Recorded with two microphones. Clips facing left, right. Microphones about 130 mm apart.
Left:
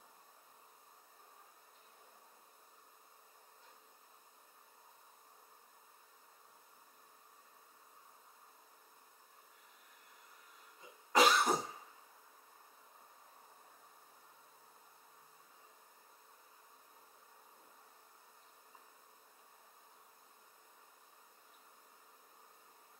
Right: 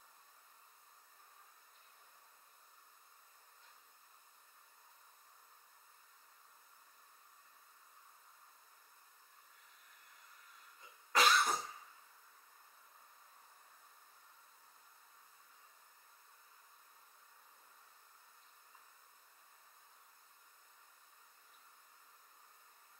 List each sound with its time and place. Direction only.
10.8 s cough: 15° left (ahead or behind)